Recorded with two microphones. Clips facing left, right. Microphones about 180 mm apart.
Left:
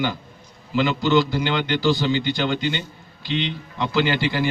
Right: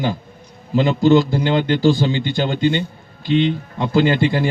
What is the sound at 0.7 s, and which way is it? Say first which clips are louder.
A man's voice: right 5 dB; 45° right (ahead or behind).